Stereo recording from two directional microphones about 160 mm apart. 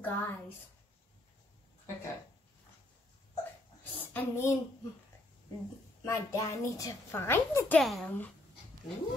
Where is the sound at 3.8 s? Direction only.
10° left (ahead or behind).